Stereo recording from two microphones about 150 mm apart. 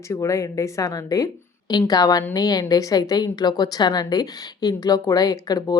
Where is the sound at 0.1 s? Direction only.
20° left (ahead or behind).